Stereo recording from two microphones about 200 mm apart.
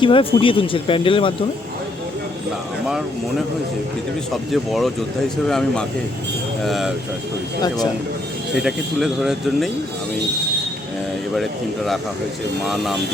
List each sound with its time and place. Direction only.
0.0 s speech: 25° left (ahead or behind)
4.5 s speech: centre (ahead or behind)
8.5 s speech: 5° right (ahead or behind)
12.6 s speech: centre (ahead or behind)